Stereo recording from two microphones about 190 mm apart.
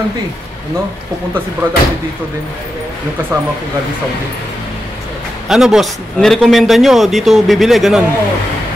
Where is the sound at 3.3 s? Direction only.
15° right (ahead or behind).